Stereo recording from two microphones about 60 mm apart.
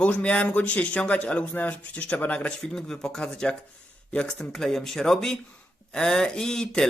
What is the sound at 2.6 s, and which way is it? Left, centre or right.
A man's voice, centre.